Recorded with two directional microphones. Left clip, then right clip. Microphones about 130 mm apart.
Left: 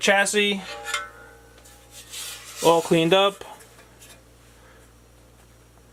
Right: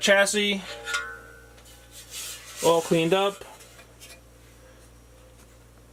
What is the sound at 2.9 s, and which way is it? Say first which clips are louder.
Speech: left 4 dB; 45° left (ahead or behind).